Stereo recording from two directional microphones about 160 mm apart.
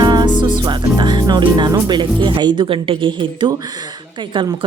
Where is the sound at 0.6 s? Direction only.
25° right (ahead or behind).